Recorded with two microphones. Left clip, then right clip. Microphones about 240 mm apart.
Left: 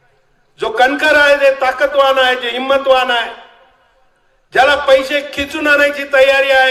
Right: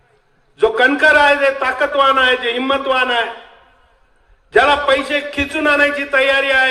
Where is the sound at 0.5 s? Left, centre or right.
Left.